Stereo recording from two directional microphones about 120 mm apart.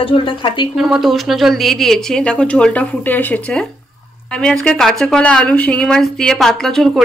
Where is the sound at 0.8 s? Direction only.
5° right (ahead or behind).